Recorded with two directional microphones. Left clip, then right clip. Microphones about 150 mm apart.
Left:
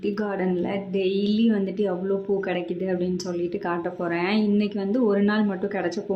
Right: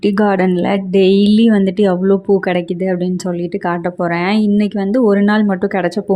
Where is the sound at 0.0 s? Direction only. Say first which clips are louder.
Right 13 dB; 70° right (ahead or behind).